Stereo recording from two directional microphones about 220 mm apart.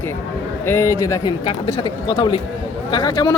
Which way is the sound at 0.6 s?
10° left (ahead or behind).